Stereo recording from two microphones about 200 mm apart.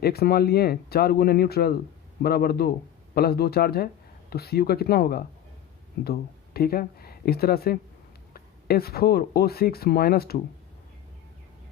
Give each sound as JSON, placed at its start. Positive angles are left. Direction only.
{"t": 0.0, "sound": "speech", "side_deg": 50}